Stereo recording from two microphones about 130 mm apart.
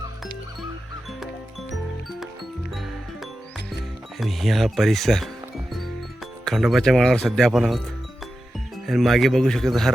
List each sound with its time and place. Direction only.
4.2 s speech: centre (ahead or behind)
8.9 s speech: centre (ahead or behind)